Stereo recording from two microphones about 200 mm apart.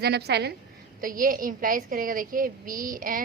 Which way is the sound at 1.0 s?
45° right (ahead or behind).